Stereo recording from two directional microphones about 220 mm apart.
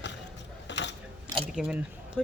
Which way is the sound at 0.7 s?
50° left (ahead or behind).